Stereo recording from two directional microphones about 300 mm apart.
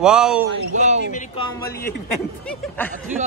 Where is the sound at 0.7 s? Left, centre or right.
Right.